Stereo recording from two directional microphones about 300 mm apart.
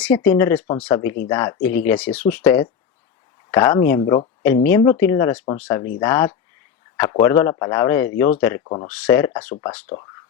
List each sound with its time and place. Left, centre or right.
0.0 s speech: centre
1.0 s speech: left
1.3 s speech: centre
8.9 s speech: centre